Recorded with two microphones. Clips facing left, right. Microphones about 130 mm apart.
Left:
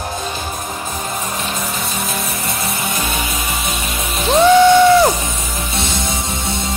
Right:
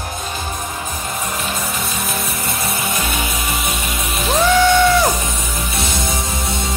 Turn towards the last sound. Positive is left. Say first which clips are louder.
# left 4 dB
turn(degrees=25)  # may be behind; listen again after turning